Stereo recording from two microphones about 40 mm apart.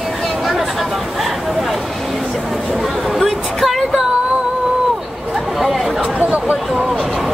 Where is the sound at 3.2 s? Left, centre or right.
Centre.